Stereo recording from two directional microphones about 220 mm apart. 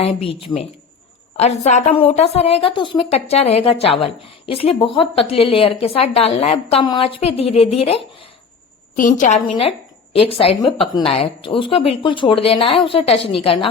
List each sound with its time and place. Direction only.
0.0 s a woman's voice: 25° left (ahead or behind)
9.5 s a woman's voice: 25° left (ahead or behind)